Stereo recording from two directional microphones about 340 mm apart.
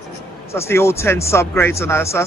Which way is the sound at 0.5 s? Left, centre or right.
Centre.